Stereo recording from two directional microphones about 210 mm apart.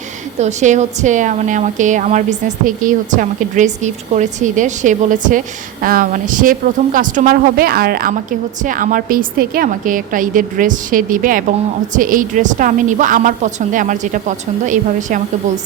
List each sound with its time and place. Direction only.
0.3 s speech: 35° right (ahead or behind)